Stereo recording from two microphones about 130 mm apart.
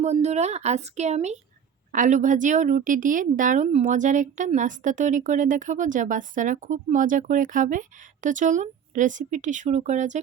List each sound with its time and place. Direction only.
0.0 s speech: 60° right (ahead or behind)
1.9 s a woman's voice: 75° right (ahead or behind)